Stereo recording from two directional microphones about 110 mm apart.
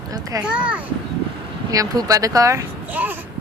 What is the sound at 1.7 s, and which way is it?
Speech, 30° right (ahead or behind).